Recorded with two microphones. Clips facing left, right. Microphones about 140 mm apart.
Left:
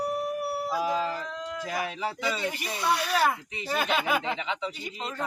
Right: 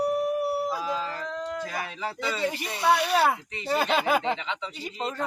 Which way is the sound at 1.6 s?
15° left (ahead or behind).